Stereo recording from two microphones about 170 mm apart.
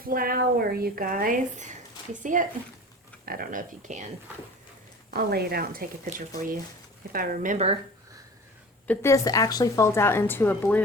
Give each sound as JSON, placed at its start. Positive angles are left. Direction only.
{"t": 0.0, "sound": "speech", "side_deg": -60}
{"t": 5.1, "sound": "speech", "side_deg": -65}
{"t": 7.1, "sound": "speech", "side_deg": -55}
{"t": 8.9, "sound": "speech", "side_deg": 15}